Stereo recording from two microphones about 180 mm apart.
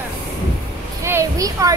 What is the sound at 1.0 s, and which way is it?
Speech, 15° right (ahead or behind).